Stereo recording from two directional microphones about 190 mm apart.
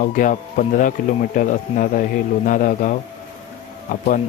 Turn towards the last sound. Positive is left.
turn(degrees=45)  # may be behind; listen again after turning